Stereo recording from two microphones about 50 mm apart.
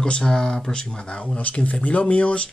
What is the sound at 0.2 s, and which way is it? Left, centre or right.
Speech, centre.